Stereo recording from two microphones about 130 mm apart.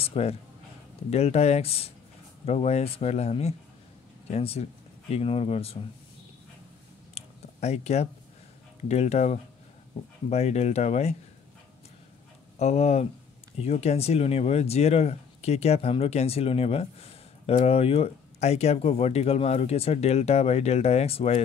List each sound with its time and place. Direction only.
0.0 s speech: 50° left (ahead or behind)
7.2 s a sound: 55° left (ahead or behind)
8.8 s speech: 55° left (ahead or behind)
12.5 s speech: 55° left (ahead or behind)